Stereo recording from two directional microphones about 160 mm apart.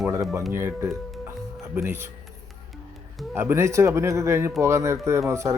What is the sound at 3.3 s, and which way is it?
A man's voice, 15° right (ahead or behind).